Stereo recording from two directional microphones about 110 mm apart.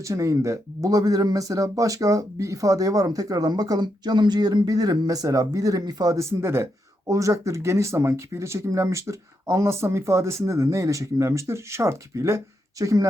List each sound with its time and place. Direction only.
0.0 s speech: 30° right (ahead or behind)
6.4 s speech: 20° right (ahead or behind)